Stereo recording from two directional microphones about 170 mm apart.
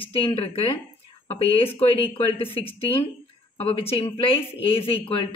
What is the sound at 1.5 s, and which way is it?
Speech, 35° left (ahead or behind).